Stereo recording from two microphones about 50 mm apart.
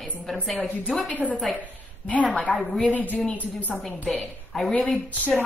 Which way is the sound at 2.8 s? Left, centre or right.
Left.